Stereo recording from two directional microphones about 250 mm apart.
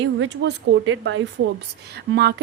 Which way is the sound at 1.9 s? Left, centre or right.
Right.